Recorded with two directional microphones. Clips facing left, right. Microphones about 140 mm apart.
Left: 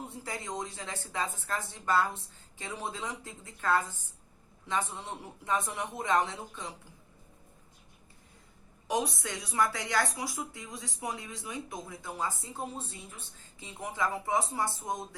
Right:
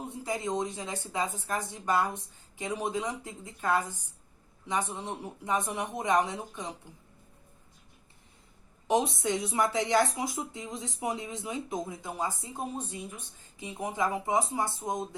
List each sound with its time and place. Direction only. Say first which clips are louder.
0.1 s a woman's voice: right 6 dB; 20° right (ahead or behind)
8.9 s speech: right 5 dB; 25° right (ahead or behind)